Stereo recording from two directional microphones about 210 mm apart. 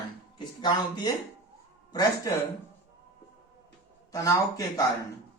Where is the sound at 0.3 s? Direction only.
20° left (ahead or behind).